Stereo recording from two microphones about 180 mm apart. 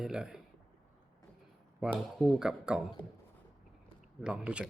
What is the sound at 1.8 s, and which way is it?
Speech, centre (ahead or behind).